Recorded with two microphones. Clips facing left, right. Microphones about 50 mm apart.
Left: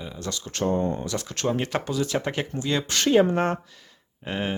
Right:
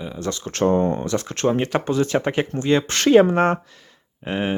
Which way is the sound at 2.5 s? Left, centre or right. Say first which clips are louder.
Right 8 dB; right.